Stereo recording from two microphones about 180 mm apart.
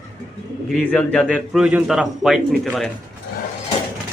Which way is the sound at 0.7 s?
5° left (ahead or behind).